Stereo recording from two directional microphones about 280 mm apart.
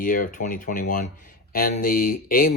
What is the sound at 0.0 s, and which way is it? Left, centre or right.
Speech, left.